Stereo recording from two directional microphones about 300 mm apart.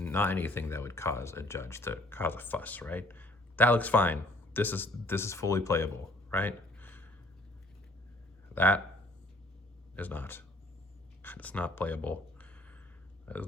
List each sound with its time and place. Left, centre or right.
0.0 s speech: centre
6.3 s a sound: centre
8.5 s speech: centre
9.9 s speech: centre